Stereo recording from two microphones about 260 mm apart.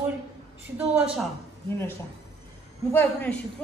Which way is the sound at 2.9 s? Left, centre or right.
Centre.